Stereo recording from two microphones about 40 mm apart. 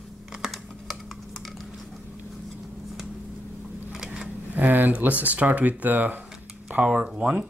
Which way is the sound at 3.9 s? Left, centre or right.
Centre.